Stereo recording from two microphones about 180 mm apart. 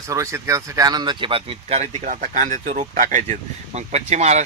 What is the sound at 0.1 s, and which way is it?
Speech, 15° right (ahead or behind).